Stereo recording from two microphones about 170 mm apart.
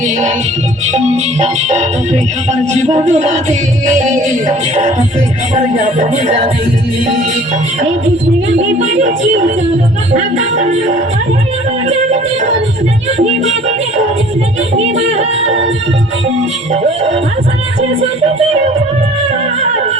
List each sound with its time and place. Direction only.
0.9 s music: 40° right (ahead or behind)
3.1 s music: 45° right (ahead or behind)
14.9 s music: 40° right (ahead or behind)